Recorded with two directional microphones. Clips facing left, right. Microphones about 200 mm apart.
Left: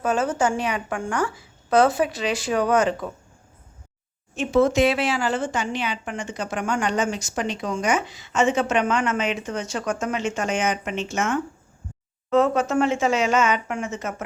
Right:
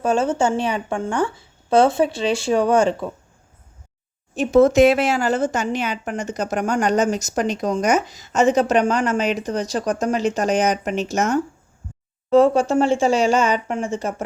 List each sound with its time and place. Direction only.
0.0 s a woman's voice: 30° right (ahead or behind)
4.4 s a woman's voice: 40° right (ahead or behind)